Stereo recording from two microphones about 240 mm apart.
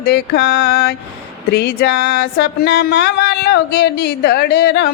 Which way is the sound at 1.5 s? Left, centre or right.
Left.